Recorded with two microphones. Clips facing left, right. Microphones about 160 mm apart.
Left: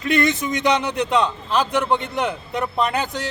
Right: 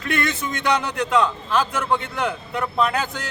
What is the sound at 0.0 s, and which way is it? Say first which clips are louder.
A man's voice: left 5 dB; 20° left (ahead or behind).